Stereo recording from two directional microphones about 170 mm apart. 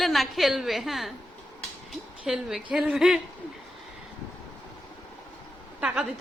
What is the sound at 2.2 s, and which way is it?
A woman's voice, centre (ahead or behind).